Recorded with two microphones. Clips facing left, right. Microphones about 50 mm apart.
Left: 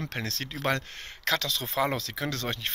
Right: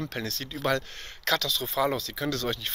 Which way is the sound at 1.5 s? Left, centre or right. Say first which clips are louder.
Right 1 dB; left.